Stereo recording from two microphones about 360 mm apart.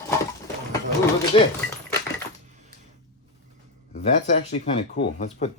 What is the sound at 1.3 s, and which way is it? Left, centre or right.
Speech, centre.